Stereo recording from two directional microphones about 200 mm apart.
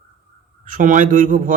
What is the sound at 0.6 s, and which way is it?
Speech, 40° right (ahead or behind).